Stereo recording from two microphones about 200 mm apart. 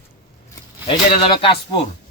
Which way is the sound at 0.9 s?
25° left (ahead or behind).